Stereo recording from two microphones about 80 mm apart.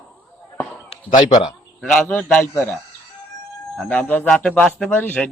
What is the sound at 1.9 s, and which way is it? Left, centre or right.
Speech, centre.